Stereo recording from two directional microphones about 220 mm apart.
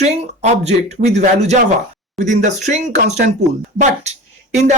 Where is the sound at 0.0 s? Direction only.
30° right (ahead or behind).